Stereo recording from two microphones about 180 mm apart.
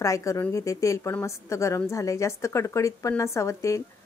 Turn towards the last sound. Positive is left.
turn(degrees=15)  # may be behind; listen again after turning